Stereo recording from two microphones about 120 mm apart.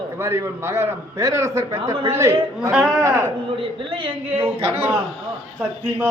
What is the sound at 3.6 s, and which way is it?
Speech, 45° right (ahead or behind).